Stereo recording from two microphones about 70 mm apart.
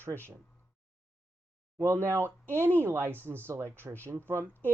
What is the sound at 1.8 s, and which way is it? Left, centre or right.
Speech, right.